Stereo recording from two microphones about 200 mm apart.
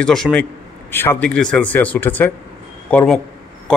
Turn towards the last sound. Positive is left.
turn(degrees=5)  # may be behind; listen again after turning